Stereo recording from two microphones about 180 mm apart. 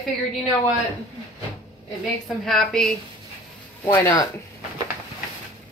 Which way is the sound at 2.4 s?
Centre (ahead or behind).